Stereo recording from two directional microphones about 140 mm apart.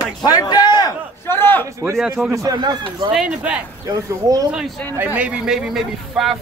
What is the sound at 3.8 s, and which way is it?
Speech, 25° right (ahead or behind).